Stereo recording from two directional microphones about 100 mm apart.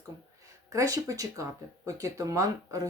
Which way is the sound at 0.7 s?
35° right (ahead or behind).